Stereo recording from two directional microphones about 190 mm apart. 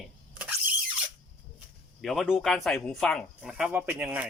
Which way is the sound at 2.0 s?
Centre (ahead or behind).